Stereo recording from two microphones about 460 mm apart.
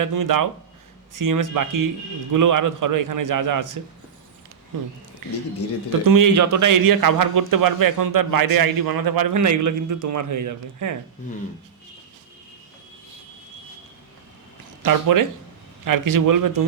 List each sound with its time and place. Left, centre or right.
0.0 s a man's voice: right
5.2 s a man's voice: right
14.8 s a man's voice: right